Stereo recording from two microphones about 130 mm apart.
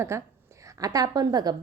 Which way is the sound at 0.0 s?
20° right (ahead or behind).